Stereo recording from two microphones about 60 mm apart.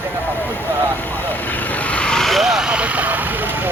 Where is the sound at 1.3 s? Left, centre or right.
Left.